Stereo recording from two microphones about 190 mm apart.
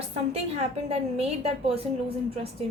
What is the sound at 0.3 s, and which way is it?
A woman's voice, 35° right (ahead or behind).